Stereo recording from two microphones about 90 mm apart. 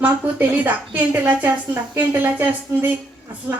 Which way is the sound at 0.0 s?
20° right (ahead or behind).